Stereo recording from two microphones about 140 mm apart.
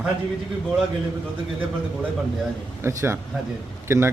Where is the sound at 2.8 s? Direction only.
20° right (ahead or behind).